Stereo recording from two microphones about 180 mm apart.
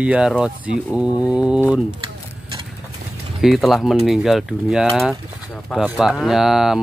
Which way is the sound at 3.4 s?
Centre (ahead or behind).